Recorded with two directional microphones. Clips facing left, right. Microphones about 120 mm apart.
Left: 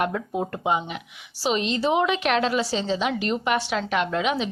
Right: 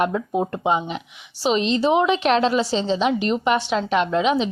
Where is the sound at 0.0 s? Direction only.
25° right (ahead or behind).